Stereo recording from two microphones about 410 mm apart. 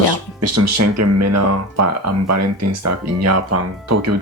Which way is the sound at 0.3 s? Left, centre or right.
Right.